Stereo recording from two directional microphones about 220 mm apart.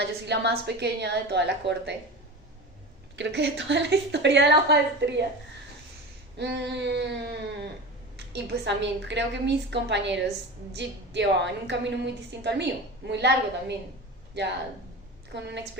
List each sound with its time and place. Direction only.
0.0 s a woman's voice: 50° right (ahead or behind)
3.2 s a woman's voice: 55° right (ahead or behind)
6.3 s a woman's voice: 50° right (ahead or behind)
15.3 s a woman's voice: 50° right (ahead or behind)